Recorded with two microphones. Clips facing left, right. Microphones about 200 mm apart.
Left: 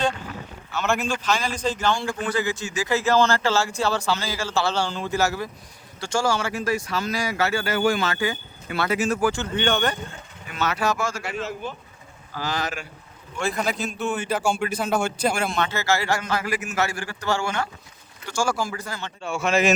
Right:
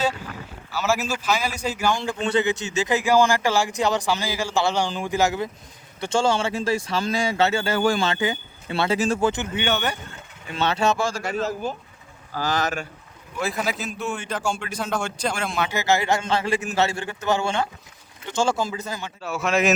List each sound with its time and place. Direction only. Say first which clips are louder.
0.7 s speech: even; 5° right (ahead or behind)
2.0 s speech: right 3 dB; 25° right (ahead or behind)
9.6 s speech: left 2 dB; 10° right (ahead or behind)
10.5 s speech: right 3 dB; 30° right (ahead or behind); by 12.9 s 45° right (ahead or behind)
13.4 s a man's voice: left 1 dB; centre (ahead or behind)
15.7 s speech: right 2 dB; 20° right (ahead or behind)
19.2 s a man's voice: left 1 dB; centre (ahead or behind)